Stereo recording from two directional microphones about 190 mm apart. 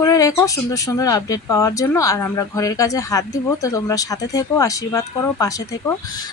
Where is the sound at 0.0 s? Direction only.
15° left (ahead or behind).